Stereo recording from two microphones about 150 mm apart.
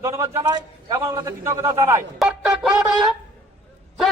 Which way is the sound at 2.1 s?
5° right (ahead or behind).